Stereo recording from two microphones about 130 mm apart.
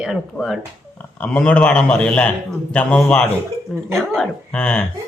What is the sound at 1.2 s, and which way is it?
A man's voice, 10° left (ahead or behind).